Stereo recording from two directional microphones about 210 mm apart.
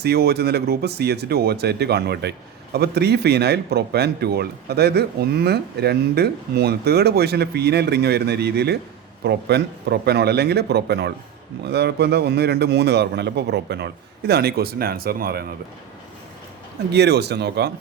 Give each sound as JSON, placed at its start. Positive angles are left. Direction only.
{"t": 0.0, "sound": "a man's voice", "side_deg": -50}
{"t": 16.9, "sound": "a man's voice", "side_deg": -50}